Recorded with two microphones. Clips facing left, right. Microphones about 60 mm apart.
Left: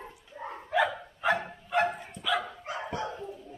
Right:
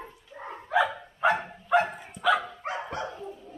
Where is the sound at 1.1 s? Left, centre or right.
Right.